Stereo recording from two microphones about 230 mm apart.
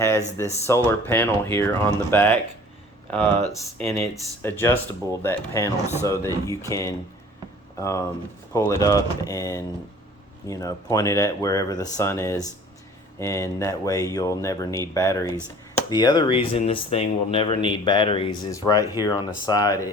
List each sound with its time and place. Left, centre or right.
0.0 s speech: centre
3.8 s speech: centre